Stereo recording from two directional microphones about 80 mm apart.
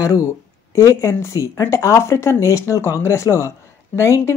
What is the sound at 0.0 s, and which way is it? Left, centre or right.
Speech, left.